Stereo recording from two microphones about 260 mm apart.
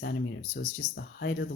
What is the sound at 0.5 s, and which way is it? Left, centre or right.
Speech, left.